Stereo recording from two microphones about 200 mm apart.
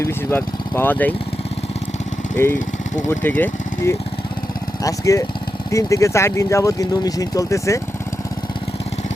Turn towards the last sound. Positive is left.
turn(degrees=15)  # may be behind; listen again after turning